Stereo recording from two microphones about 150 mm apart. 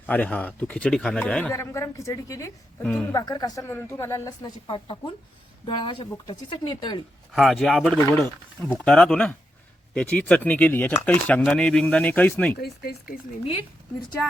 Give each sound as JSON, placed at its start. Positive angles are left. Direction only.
{"t": 0.0, "sound": "speech", "side_deg": 10}
{"t": 1.5, "sound": "a woman's voice", "side_deg": 20}
{"t": 2.8, "sound": "speech", "side_deg": 5}
{"t": 3.1, "sound": "a woman's voice", "side_deg": 25}
{"t": 7.3, "sound": "speech", "side_deg": 0}
{"t": 12.5, "sound": "speech", "side_deg": 90}